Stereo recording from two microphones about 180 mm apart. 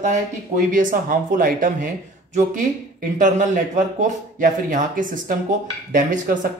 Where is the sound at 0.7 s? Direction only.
50° right (ahead or behind).